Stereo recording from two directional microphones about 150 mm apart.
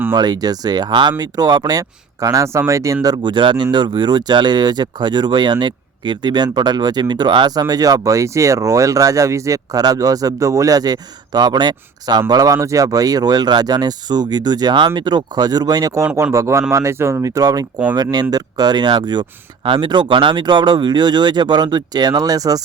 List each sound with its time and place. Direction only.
0.1 s speech: 30° right (ahead or behind)